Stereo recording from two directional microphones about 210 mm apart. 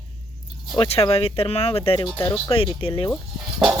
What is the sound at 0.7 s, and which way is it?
Speech, 30° left (ahead or behind).